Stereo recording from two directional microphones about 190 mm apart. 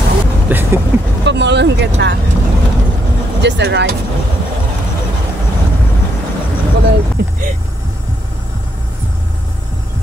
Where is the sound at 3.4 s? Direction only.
65° right (ahead or behind).